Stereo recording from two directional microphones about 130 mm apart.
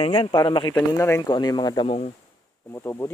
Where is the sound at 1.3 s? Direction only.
35° left (ahead or behind).